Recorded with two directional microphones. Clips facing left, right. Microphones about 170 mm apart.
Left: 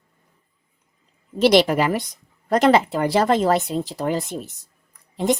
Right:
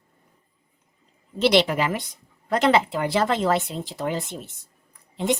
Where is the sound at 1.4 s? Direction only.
40° left (ahead or behind).